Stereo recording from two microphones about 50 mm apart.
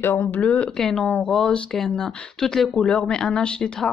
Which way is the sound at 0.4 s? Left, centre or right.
Left.